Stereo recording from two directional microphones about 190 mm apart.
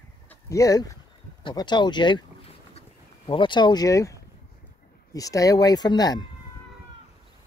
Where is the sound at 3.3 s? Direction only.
25° left (ahead or behind).